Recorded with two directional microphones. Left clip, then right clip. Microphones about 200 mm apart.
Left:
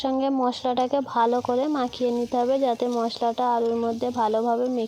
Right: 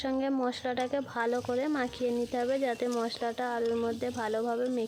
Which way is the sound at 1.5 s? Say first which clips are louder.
Left 7 dB; 20° left (ahead or behind).